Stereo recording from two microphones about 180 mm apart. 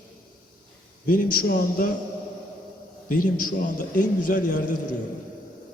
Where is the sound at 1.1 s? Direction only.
50° left (ahead or behind).